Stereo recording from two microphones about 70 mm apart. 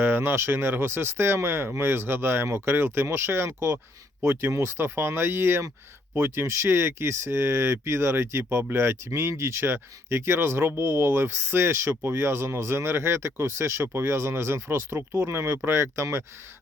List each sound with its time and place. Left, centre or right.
0.0 s speech: right